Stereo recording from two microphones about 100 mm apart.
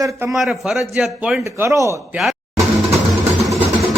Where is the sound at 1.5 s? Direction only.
30° right (ahead or behind).